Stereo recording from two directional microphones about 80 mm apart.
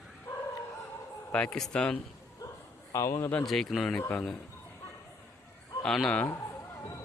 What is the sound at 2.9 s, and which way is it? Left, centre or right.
Speech, left.